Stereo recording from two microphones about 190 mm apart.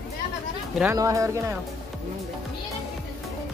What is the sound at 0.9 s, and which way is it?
Speech, 15° right (ahead or behind).